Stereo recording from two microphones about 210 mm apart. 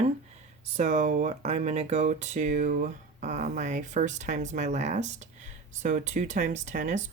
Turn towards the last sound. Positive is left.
turn(degrees=-35)  # may be behind; listen again after turning